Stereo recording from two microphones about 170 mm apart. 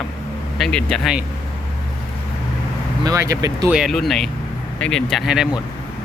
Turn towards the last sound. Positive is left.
turn(degrees=-5)  # may be behind; listen again after turning